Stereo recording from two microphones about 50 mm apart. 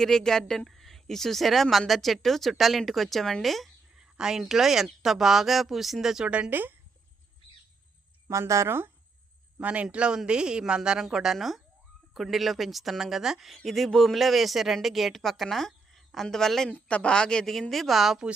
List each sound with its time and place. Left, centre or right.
0.0 s speech: centre
3.9 s a woman's voice: centre
6.2 s speech: right
6.5 s speech: right
8.3 s speech: right
9.6 s a man's voice: right; by 16.6 s centre
16.6 s speech: left; by 18.3 s centre